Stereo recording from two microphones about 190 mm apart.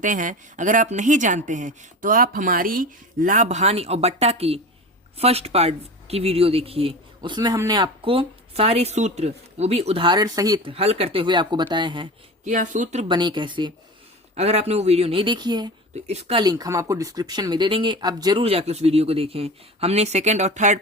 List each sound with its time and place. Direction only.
0.0 s speech: 45° right (ahead or behind); by 10.8 s 20° right (ahead or behind)
10.8 s speech: 30° right (ahead or behind)
12.5 s speech: 40° right (ahead or behind)
13.1 s speech: 25° right (ahead or behind)
14.3 s speech: 35° right (ahead or behind)
16.0 s speech: 35° right (ahead or behind)
16.4 s speech: 20° right (ahead or behind); by 20.7 s 40° right (ahead or behind)